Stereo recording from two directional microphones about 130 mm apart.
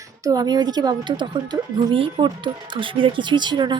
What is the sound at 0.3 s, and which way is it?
A woman's voice, 30° right (ahead or behind).